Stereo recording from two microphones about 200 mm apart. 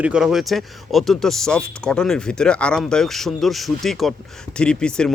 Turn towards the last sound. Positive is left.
turn(degrees=5)  # may be behind; listen again after turning